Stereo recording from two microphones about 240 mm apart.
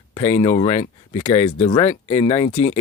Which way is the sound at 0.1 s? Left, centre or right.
Left.